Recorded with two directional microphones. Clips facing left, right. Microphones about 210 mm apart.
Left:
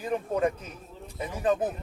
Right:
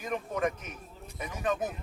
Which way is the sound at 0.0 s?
30° left (ahead or behind).